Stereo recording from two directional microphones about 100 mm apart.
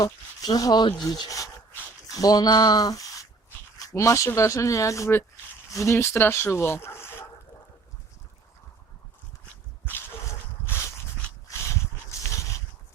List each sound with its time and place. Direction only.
0.0 s speech: 40° left (ahead or behind)
2.0 s speech: 35° left (ahead or behind)
10.7 s a sound: 30° left (ahead or behind)